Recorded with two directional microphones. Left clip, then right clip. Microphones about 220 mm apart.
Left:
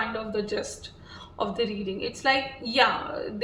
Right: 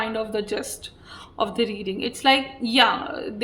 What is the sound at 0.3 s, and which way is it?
Speech, 45° right (ahead or behind).